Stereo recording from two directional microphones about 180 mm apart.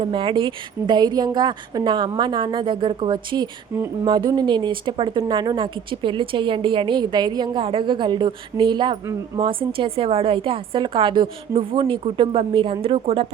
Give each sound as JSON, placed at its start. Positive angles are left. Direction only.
{"t": 0.0, "sound": "speech", "side_deg": -30}